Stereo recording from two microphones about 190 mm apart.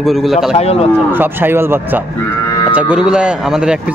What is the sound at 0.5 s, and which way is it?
Speech, 30° left (ahead or behind).